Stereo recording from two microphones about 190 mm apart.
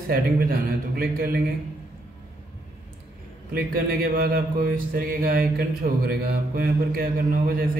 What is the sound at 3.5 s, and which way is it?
Speech, 50° right (ahead or behind).